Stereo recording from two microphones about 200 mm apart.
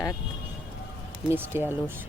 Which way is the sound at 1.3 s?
10° right (ahead or behind).